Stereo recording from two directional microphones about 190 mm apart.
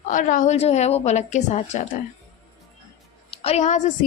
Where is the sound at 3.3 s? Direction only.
30° left (ahead or behind).